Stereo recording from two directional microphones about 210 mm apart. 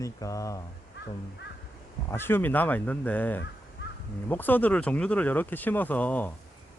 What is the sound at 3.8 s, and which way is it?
Crow, 60° left (ahead or behind).